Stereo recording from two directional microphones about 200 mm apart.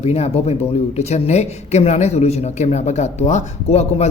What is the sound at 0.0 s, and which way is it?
Speech, 30° left (ahead or behind).